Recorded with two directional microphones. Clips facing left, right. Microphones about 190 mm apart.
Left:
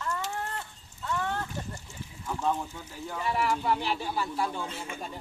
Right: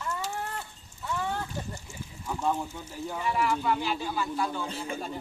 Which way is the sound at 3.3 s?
35° left (ahead or behind).